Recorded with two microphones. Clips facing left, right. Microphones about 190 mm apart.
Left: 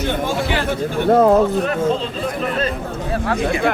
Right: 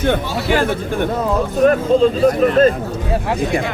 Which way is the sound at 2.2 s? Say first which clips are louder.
Right 10 dB; 45° right (ahead or behind).